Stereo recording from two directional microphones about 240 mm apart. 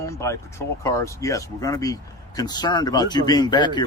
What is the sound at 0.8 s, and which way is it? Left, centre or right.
Speech, centre.